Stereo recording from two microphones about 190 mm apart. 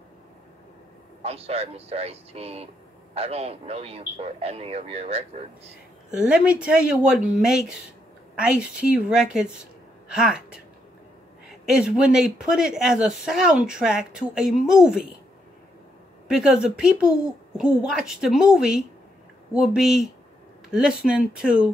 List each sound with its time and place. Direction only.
1.2 s speech: 30° right (ahead or behind)
6.1 s speech: 5° right (ahead or behind)
16.3 s speech: 5° right (ahead or behind)